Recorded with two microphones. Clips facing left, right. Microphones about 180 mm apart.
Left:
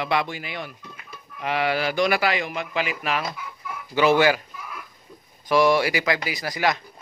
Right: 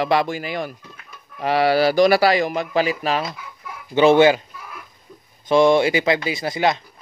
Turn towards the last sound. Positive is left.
turn(degrees=-25)  # may be behind; listen again after turning